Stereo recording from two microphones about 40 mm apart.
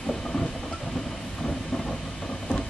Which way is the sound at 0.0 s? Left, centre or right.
Centre.